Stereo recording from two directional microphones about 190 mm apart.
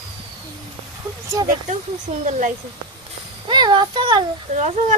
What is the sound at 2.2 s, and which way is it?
Speech, 40° right (ahead or behind).